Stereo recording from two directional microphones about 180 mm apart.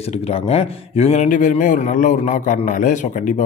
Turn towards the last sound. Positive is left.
turn(degrees=45)  # may be behind; listen again after turning